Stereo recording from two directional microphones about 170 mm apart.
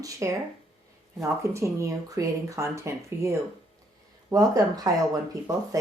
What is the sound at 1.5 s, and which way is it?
Speech, 15° right (ahead or behind).